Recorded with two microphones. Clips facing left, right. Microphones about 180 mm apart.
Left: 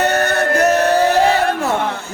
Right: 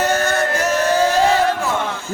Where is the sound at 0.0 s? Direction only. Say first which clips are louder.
Left 2 dB; 65° left (ahead or behind).